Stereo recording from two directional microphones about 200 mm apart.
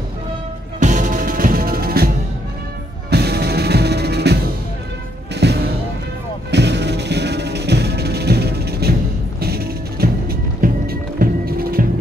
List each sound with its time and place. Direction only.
0.7 s music: 40° right (ahead or behind)
3.1 s music: 55° right (ahead or behind)